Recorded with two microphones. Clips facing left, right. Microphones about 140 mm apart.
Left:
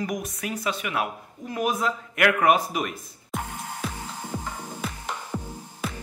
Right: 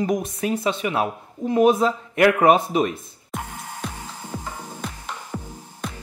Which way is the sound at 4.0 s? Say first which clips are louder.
Even; 10° left (ahead or behind).